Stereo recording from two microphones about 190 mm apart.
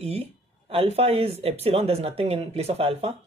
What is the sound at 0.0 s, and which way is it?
Speech, 30° right (ahead or behind).